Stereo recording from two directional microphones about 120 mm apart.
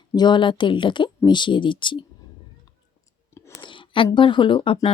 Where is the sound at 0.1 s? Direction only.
35° left (ahead or behind).